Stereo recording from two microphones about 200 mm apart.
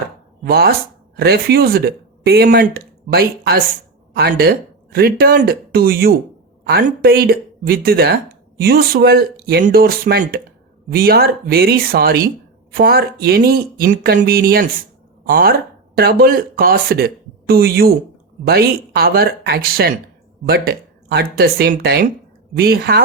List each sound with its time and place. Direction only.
0.4 s speech: 50° right (ahead or behind)